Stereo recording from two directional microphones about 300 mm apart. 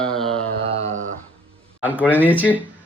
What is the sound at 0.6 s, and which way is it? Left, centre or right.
Speech, centre.